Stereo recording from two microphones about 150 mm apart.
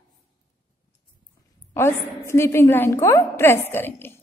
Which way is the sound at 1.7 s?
15° left (ahead or behind).